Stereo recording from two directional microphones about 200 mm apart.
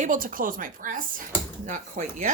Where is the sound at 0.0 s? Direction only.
40° right (ahead or behind).